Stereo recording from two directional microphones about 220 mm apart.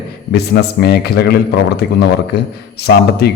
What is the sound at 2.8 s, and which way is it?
Speech, 45° left (ahead or behind).